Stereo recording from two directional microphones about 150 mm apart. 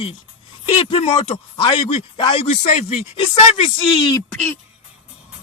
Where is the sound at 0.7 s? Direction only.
40° left (ahead or behind).